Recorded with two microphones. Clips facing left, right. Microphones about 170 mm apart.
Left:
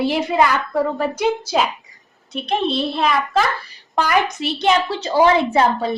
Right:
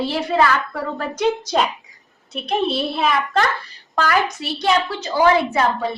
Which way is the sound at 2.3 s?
5° right (ahead or behind).